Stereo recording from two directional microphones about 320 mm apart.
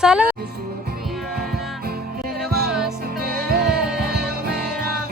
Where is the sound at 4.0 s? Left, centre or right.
Right.